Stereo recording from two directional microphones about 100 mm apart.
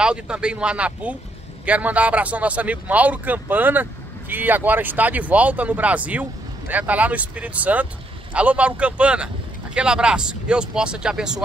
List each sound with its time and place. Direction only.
0.0 s speech: 10° right (ahead or behind)